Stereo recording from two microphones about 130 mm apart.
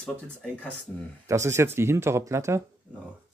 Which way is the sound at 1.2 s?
20° right (ahead or behind).